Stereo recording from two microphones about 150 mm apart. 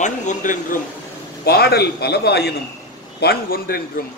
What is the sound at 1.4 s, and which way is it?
A man's voice, 90° left.